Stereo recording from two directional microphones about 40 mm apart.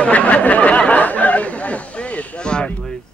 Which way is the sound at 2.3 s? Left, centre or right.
Left.